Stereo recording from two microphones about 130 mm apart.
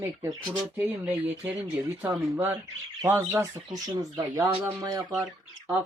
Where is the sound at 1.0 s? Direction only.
10° right (ahead or behind).